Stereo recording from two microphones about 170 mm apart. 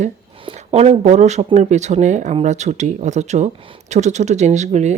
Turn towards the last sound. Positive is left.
turn(degrees=-40)  # may be behind; listen again after turning